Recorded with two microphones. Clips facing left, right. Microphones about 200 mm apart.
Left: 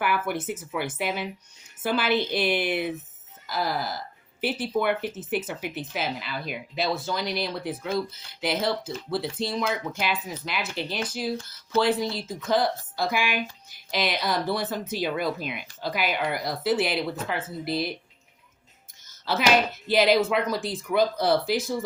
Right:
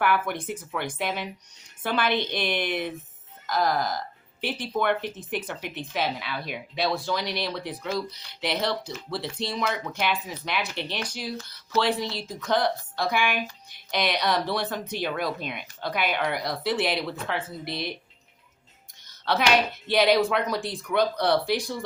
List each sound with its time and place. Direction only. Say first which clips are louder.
0.0 s a woman's voice: right 1 dB; 5° left (ahead or behind)
19.0 s a sound: right 2 dB; 5° left (ahead or behind)
19.9 s a woman's voice: even; 5° left (ahead or behind)